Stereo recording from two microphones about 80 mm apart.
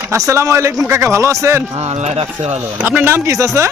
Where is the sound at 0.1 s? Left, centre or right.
Right.